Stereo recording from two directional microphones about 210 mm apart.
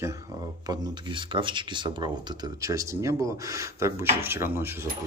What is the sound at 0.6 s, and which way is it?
Speech, 25° right (ahead or behind).